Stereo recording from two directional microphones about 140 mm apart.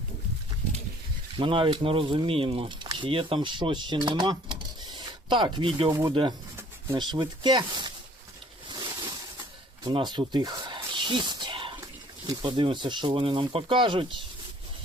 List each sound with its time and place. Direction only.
1.4 s speech: 40° right (ahead or behind)
4.8 s a sound: 30° right (ahead or behind)
5.9 s speech: 20° right (ahead or behind)
6.9 s speech: 30° right (ahead or behind)
9.8 s snake: 30° right (ahead or behind)
12.2 s speech: 30° right (ahead or behind)